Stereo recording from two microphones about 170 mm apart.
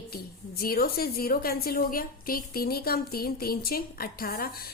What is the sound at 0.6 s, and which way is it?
A woman's voice, 65° left (ahead or behind).